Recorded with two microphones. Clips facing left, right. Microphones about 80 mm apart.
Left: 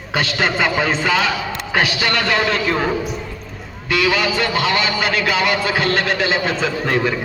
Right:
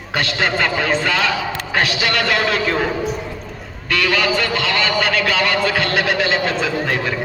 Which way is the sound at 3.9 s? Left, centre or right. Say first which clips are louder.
Even; centre.